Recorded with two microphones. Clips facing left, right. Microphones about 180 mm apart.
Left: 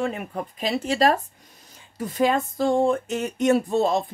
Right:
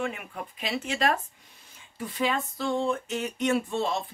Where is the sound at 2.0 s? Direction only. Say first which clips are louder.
Left 7 dB; 45° left (ahead or behind).